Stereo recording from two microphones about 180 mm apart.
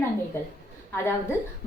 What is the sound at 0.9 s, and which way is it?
Speech, 15° left (ahead or behind).